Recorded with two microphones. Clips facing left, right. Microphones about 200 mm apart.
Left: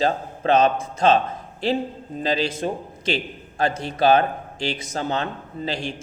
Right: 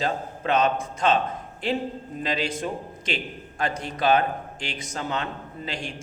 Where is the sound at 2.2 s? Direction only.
35° left (ahead or behind).